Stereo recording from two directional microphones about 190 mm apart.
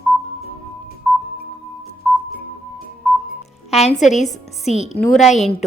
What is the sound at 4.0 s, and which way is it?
A woman's voice, 40° left (ahead or behind).